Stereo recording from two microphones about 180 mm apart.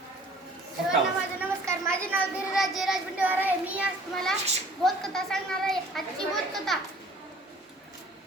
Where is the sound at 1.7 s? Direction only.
15° right (ahead or behind).